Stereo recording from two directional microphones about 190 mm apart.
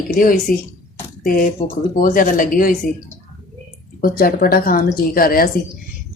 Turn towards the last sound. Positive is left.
turn(degrees=50)  # may be behind; listen again after turning